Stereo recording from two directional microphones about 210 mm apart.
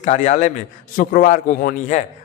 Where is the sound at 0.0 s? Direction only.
35° left (ahead or behind).